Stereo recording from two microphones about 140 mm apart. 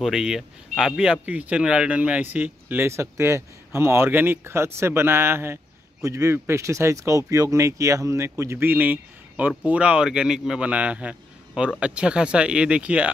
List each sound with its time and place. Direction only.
0.0 s speech: 5° right (ahead or behind)